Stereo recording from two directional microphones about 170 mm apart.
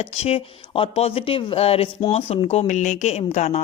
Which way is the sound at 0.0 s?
40° left (ahead or behind).